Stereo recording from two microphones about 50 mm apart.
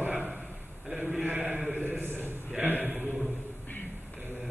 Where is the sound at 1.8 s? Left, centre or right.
Right.